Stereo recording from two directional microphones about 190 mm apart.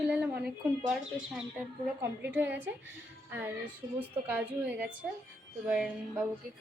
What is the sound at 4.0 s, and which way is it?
Speech, 10° right (ahead or behind).